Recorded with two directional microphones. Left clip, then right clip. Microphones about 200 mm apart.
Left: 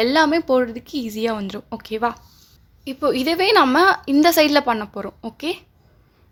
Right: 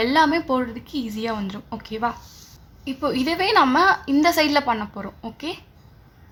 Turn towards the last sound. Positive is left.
turn(degrees=40)  # may be behind; listen again after turning